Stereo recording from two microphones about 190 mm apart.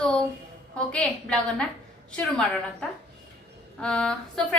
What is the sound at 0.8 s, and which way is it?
Speech, 5° left (ahead or behind).